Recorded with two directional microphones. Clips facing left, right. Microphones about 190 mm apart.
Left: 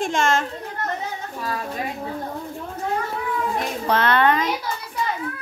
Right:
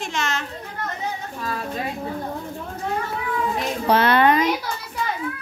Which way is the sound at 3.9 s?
10° right (ahead or behind).